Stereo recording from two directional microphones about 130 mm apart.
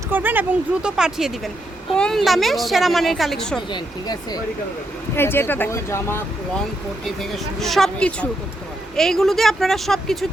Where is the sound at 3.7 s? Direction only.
30° left (ahead or behind).